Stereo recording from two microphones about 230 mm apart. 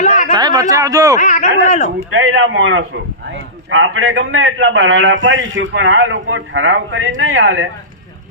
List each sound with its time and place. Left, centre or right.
0.3 s speech: centre
1.2 s speech: left
2.0 s a man's voice: right